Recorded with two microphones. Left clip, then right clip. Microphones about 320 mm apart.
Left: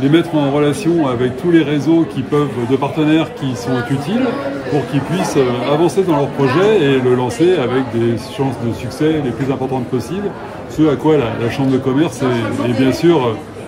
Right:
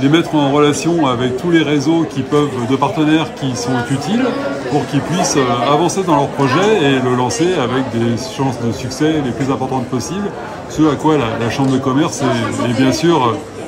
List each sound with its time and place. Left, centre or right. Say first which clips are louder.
0.0 s speech: right 1 dB; centre
5.2 s speech: right 2 dB; centre
10.8 s speech: even; centre